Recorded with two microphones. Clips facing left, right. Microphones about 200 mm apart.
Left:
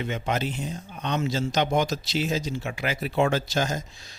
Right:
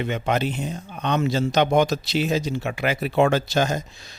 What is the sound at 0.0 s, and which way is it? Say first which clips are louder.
A man's voice: right 4 dB; 65° right (ahead or behind).